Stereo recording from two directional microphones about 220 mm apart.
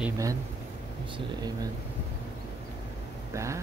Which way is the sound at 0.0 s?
15° right (ahead or behind).